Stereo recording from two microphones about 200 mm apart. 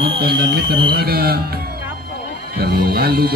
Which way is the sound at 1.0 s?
50° right (ahead or behind).